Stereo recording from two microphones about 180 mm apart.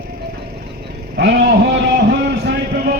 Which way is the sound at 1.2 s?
75° right (ahead or behind).